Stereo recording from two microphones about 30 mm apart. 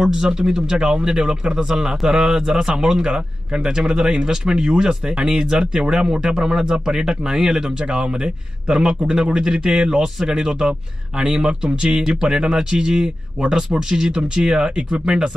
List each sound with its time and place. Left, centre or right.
0.0 s speech: right
3.0 s speech: right
3.6 s speech: right